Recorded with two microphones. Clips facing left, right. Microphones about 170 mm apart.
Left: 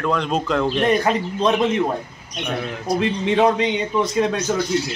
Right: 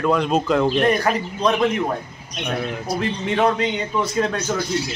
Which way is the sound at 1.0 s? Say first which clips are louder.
Left 1 dB; 20° left (ahead or behind).